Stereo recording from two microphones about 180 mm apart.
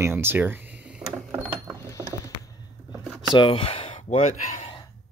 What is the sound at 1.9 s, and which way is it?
Mechanisms, 20° left (ahead or behind).